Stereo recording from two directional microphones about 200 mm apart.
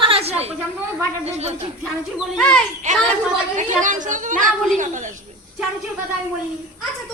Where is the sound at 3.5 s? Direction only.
40° right (ahead or behind).